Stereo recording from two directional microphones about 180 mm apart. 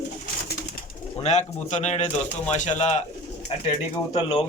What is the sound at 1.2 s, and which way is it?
Speech, 40° left (ahead or behind).